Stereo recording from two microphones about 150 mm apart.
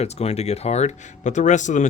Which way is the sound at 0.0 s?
45° left (ahead or behind).